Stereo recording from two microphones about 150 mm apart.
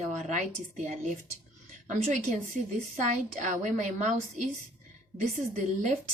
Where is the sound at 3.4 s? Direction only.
55° right (ahead or behind).